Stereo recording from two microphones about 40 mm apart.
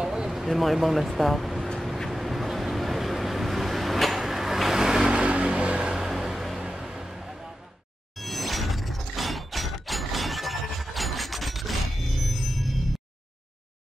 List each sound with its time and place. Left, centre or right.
0.0 s a sound: centre
0.4 s speech: centre
2.0 s vehicle: centre
5.2 s a sound: right
5.9 s music: centre
6.6 s vehicle: centre
8.2 s shatter: centre